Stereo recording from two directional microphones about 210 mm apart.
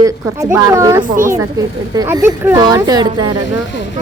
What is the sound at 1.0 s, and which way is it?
Speech, 40° right (ahead or behind).